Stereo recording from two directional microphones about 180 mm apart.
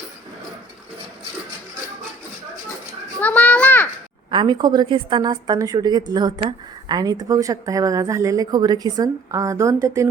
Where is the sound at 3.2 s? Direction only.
10° left (ahead or behind).